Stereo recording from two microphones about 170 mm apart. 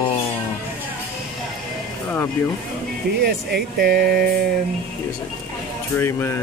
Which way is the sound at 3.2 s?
70° right (ahead or behind).